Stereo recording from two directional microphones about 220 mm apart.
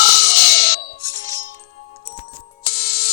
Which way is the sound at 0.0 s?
45° left (ahead or behind).